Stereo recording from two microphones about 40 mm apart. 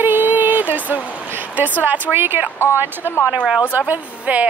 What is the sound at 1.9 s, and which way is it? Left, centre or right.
Speech, right.